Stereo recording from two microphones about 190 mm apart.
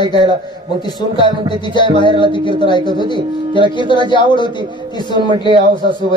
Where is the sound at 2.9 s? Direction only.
25° left (ahead or behind).